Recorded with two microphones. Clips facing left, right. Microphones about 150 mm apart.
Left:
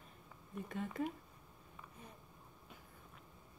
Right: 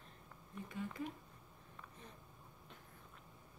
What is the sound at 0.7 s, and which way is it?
Speech, 55° left (ahead or behind).